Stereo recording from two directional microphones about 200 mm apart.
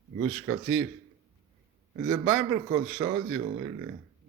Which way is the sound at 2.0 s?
15° right (ahead or behind).